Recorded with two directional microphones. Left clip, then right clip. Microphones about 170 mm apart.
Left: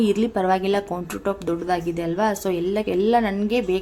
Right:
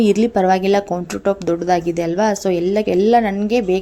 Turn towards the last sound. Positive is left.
turn(degrees=-20)  # may be behind; listen again after turning